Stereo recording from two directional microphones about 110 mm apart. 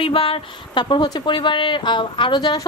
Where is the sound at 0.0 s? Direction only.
55° left (ahead or behind).